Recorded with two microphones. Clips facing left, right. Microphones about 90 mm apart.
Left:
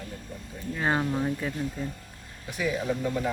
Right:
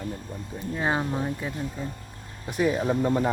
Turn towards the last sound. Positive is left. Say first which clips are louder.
# right 5 dB
turn(degrees=-40)  # may be behind; listen again after turning